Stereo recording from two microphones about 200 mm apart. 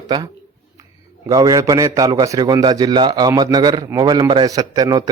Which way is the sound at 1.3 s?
20° right (ahead or behind).